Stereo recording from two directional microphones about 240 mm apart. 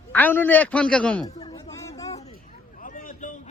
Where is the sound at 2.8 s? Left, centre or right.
Left.